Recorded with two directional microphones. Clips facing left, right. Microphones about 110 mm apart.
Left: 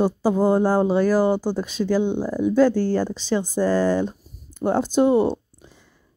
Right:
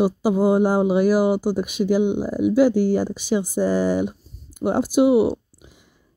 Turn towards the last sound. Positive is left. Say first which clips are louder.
# right 1 dB
turn(degrees=-10)  # may be behind; listen again after turning